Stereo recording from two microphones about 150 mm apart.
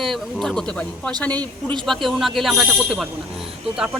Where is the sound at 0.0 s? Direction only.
Centre (ahead or behind).